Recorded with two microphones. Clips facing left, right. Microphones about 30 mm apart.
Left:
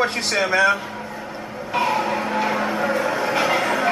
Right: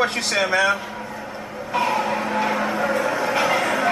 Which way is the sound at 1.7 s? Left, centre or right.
Centre.